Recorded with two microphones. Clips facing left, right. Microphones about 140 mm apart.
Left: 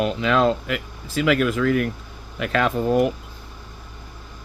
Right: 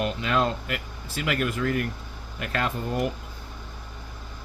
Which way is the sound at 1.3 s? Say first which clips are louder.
Left 7 dB; 90° left.